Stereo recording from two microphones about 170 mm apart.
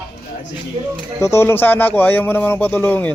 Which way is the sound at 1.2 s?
15° left (ahead or behind).